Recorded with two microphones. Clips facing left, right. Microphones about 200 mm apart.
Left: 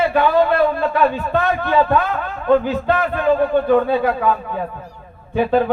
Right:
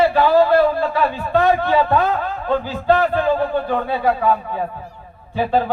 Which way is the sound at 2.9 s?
30° right (ahead or behind).